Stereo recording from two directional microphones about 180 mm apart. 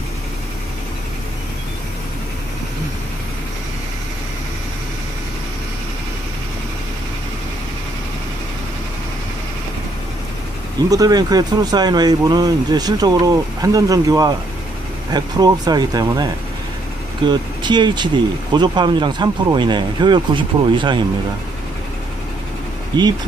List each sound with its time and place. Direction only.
10.9 s speech: 20° right (ahead or behind)
17.3 s speech: 25° right (ahead or behind)
22.9 s speech: 25° right (ahead or behind)